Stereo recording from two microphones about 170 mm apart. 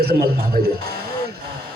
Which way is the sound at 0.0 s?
65° right (ahead or behind).